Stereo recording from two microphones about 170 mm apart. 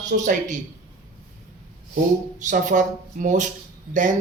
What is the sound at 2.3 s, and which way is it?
Speech, 50° right (ahead or behind).